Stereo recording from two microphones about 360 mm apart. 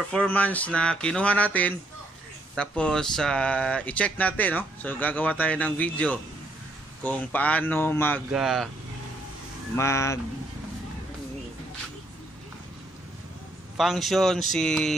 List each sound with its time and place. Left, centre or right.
0.1 s speech: centre
9.8 s speech: centre
13.7 s speech: centre